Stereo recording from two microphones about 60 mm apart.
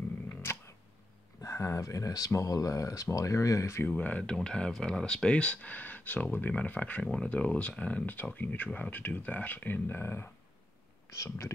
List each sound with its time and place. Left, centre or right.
0.3 s a sound: left
1.4 s speech: left
3.8 s speech: left
4.2 s speech: centre; by 10.3 s left
11.1 s speech: left